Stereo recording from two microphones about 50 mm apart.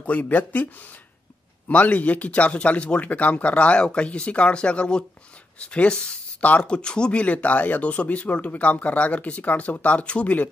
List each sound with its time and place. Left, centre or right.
0.0 s speech: left
1.7 s speech: left